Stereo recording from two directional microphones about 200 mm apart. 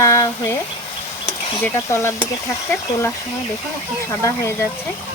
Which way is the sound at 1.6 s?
15° left (ahead or behind).